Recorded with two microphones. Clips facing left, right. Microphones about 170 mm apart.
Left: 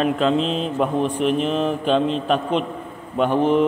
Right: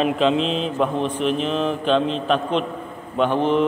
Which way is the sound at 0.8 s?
10° left (ahead or behind).